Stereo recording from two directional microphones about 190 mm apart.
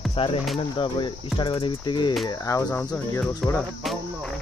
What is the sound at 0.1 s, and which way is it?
Speech, 30° left (ahead or behind).